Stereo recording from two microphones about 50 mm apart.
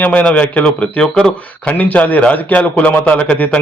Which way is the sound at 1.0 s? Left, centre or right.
Centre.